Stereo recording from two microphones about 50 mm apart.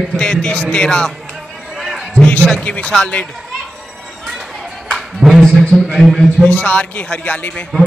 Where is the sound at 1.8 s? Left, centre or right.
Centre.